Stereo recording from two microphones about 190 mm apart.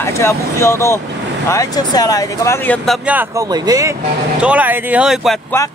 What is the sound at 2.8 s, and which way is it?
Speech, 5° right (ahead or behind).